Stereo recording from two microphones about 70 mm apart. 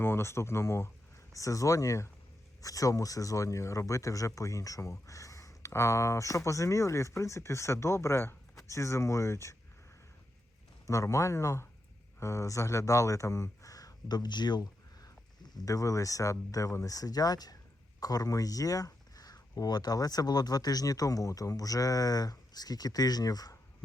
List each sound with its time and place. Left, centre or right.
0.0 s speech: left
1.3 s speech: left
10.8 s speech: left
15.5 s speech: left